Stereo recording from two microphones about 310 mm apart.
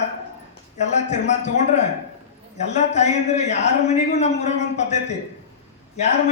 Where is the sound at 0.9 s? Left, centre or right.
Left.